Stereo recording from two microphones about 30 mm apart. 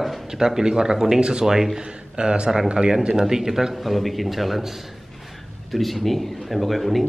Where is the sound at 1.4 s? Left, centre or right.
Centre.